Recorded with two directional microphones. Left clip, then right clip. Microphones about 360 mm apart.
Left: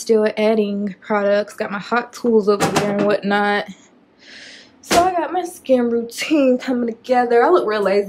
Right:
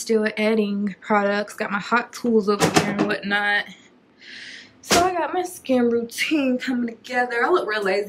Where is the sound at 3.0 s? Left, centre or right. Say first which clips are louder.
Left 5 dB; centre.